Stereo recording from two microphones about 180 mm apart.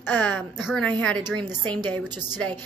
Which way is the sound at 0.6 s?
Centre (ahead or behind).